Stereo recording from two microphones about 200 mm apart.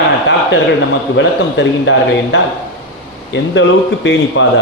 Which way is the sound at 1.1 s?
65° left (ahead or behind).